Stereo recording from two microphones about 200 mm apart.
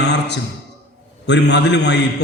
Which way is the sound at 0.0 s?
60° left (ahead or behind).